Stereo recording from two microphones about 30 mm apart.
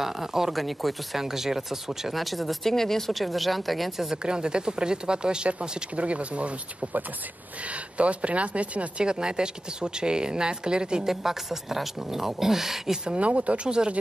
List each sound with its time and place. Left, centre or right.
0.0 s a woman's voice: centre
0.5 s speech: centre
1.1 s a woman's voice: centre
2.1 s speech: centre
2.6 s speech: centre
3.1 s speech: centre
4.2 s speech: right
5.5 s speech: right
8.0 s speech: right
9.0 s speech: right
11.1 s a woman's voice: centre
13.2 s speech: right
13.7 s speech: right